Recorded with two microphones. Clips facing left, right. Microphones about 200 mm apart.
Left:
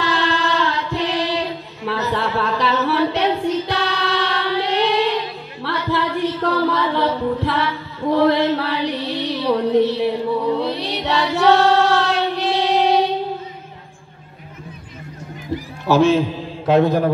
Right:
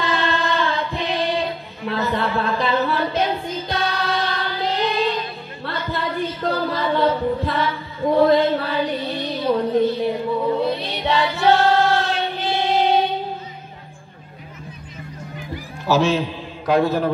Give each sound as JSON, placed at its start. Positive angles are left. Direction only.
{"t": 0.0, "sound": "choir", "side_deg": 75}
{"t": 1.9, "sound": "a sound", "side_deg": 80}
{"t": 5.6, "sound": "a capella", "side_deg": 70}
{"t": 8.2, "sound": "music", "side_deg": 75}
{"t": 15.9, "sound": "a man's voice", "side_deg": 55}
{"t": 16.6, "sound": "a man's voice", "side_deg": 20}